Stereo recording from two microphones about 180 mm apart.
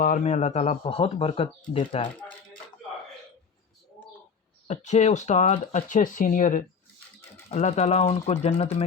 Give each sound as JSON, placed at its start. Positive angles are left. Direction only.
{"t": 0.0, "sound": "speech", "side_deg": 45}
{"t": 4.7, "sound": "speech", "side_deg": 40}